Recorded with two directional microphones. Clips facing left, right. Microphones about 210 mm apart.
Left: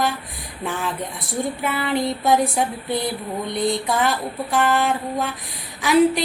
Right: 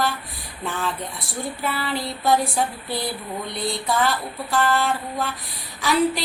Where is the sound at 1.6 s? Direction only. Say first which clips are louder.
Left 4 dB; 20° left (ahead or behind).